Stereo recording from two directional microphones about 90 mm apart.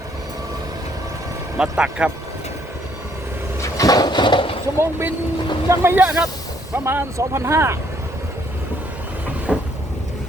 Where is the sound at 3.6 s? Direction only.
40° left (ahead or behind); by 4.6 s 75° left (ahead or behind).